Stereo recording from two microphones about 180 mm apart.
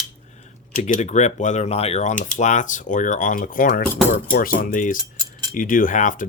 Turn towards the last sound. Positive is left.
turn(degrees=45)  # may be behind; listen again after turning